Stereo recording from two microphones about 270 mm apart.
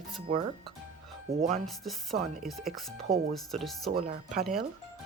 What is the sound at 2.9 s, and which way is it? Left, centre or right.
Speech, right.